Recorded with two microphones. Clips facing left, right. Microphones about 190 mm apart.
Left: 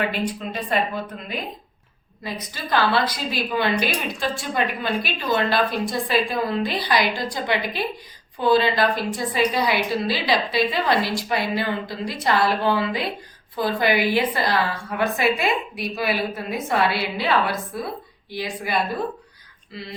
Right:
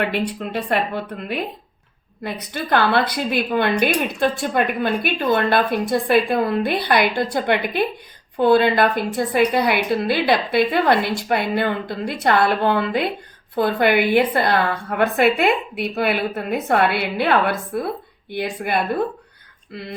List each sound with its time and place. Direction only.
0.0 s a woman's voice: 65° right (ahead or behind)